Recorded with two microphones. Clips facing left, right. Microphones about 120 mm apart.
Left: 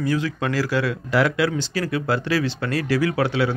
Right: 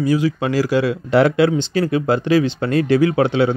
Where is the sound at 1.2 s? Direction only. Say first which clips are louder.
Right 6 dB; 25° right (ahead or behind).